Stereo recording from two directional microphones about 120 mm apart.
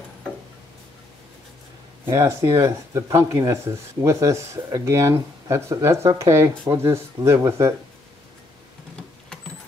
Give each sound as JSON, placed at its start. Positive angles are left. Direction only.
{"t": 2.1, "sound": "speech", "side_deg": -25}